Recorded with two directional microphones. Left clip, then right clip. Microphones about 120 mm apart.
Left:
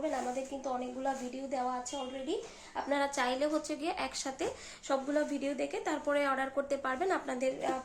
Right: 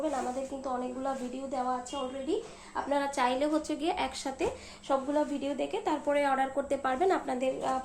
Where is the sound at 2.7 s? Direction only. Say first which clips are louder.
Right 2 dB; 30° left (ahead or behind).